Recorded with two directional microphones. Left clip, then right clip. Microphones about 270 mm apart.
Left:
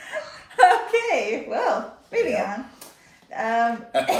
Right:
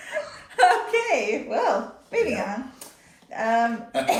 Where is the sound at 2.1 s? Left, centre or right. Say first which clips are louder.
Even; centre.